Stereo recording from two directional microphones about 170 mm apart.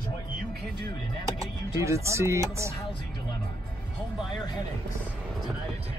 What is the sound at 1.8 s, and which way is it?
Speech, 15° right (ahead or behind).